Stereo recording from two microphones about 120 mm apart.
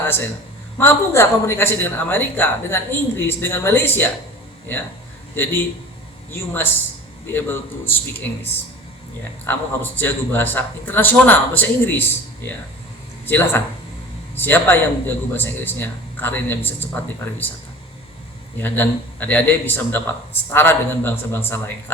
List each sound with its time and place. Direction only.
0.0 s speech: 20° left (ahead or behind)
6.3 s speech: 20° left (ahead or behind)
9.4 s speech: 15° left (ahead or behind)
13.2 s speech: 15° left (ahead or behind)
18.6 s speech: 15° left (ahead or behind)